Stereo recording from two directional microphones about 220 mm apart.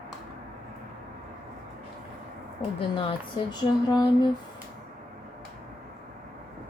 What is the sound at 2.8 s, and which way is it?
Speech, 25° left (ahead or behind).